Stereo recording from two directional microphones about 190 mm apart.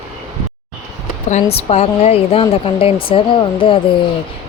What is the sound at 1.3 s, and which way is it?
A woman's voice, 35° left (ahead or behind).